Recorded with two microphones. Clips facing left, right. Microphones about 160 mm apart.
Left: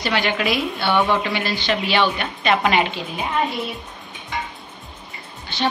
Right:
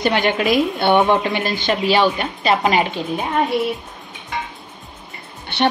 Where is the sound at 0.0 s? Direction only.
50° right (ahead or behind).